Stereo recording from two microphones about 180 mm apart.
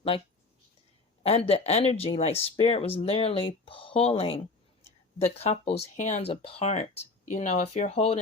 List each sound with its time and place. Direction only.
1.2 s speech: 35° left (ahead or behind)